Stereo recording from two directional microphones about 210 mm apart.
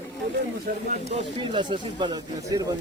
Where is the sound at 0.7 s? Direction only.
45° right (ahead or behind).